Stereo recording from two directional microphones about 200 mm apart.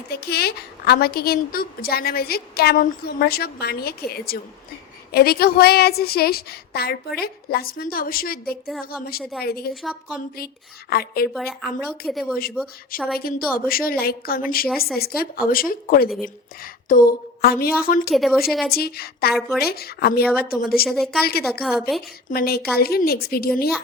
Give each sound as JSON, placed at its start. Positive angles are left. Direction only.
{"t": 0.1, "sound": "a woman's voice", "side_deg": 55}
{"t": 9.8, "sound": "a woman's voice", "side_deg": 0}
{"t": 10.3, "sound": "a woman's voice", "side_deg": 50}
{"t": 11.3, "sound": "a woman's voice", "side_deg": 0}
{"t": 13.1, "sound": "a woman's voice", "side_deg": 50}
{"t": 16.0, "sound": "a woman's voice", "side_deg": 0}
{"t": 16.9, "sound": "a woman's voice", "side_deg": 45}
{"t": 18.1, "sound": "a woman's voice", "side_deg": 0}
{"t": 18.7, "sound": "a woman's voice", "side_deg": 50}
{"t": 20.8, "sound": "a woman's voice", "side_deg": 0}
{"t": 22.3, "sound": "a woman's voice", "side_deg": 50}